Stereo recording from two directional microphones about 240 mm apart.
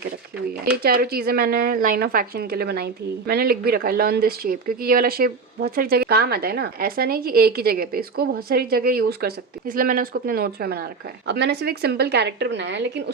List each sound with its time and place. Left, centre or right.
0.8 s a woman's voice: right